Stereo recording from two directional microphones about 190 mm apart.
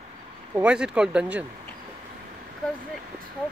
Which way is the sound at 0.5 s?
5° right (ahead or behind).